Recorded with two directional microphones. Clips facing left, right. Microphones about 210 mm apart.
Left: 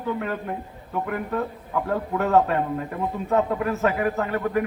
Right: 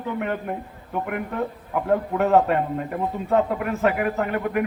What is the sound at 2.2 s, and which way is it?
Speech, 25° right (ahead or behind).